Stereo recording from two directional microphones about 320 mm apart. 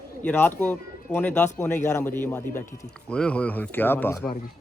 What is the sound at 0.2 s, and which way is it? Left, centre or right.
Speech, centre.